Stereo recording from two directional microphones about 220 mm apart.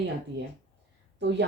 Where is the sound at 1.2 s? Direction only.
50° right (ahead or behind).